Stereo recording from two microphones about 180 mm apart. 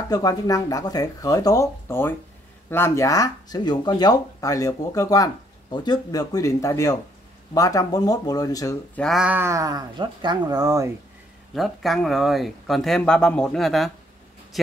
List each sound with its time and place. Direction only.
0.1 s speech: 20° left (ahead or behind)
8.9 s speech: centre (ahead or behind); by 10.9 s 20° right (ahead or behind)
11.5 s speech: centre (ahead or behind)